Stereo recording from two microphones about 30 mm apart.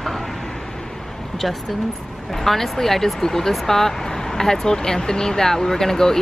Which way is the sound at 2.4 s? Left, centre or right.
Centre.